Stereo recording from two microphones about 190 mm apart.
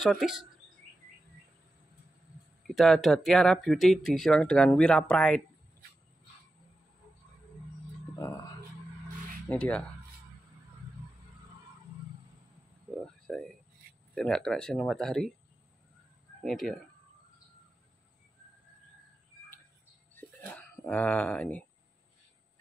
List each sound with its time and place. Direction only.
0.0 s speech: centre (ahead or behind)
2.6 s speech: centre (ahead or behind)
8.2 s music: 15° left (ahead or behind)
9.5 s speech: 5° left (ahead or behind)
12.9 s a sound: centre (ahead or behind)
14.1 s speech: 5° left (ahead or behind)
16.4 s speech: centre (ahead or behind)
20.2 s a sound: 10° left (ahead or behind)